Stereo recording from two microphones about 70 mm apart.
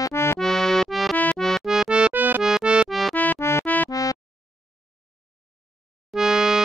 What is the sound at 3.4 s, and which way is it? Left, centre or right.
Music, left.